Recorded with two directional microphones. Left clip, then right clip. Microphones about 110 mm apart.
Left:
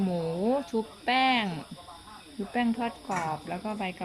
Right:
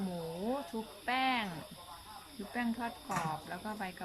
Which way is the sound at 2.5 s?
30° left (ahead or behind).